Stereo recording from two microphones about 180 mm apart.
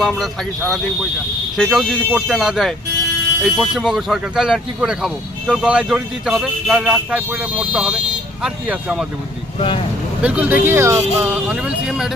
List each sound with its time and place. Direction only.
0.0 s speech: 5° left (ahead or behind)
9.6 s speech: 30° left (ahead or behind)
10.2 s speech: 10° right (ahead or behind)